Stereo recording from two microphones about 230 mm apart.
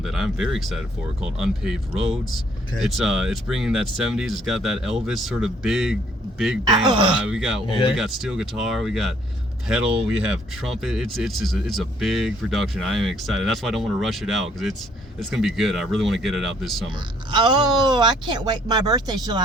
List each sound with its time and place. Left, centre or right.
0.0 s speech: centre
6.8 s speech: right
7.2 s speech: centre
7.7 s speech: left
7.9 s speech: centre
16.9 s speech: right